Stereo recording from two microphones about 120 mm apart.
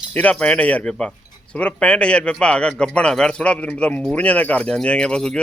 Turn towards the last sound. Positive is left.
turn(degrees=5)  # may be behind; listen again after turning